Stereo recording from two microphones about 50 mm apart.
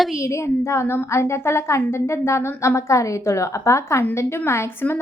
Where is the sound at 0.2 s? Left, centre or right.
Left.